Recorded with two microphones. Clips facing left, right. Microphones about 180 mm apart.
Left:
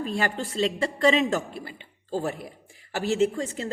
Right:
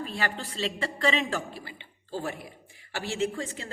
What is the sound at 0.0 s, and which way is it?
A woman's voice, 45° left (ahead or behind).